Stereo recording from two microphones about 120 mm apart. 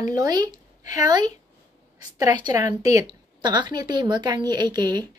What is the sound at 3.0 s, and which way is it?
Speech, 40° right (ahead or behind).